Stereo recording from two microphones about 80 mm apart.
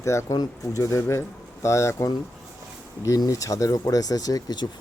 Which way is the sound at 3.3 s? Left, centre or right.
Left.